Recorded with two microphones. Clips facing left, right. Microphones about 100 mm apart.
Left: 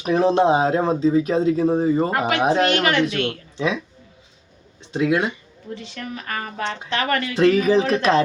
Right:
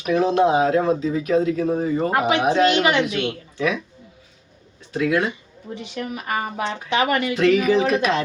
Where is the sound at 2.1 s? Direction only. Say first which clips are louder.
Right 1 dB; 20° right (ahead or behind).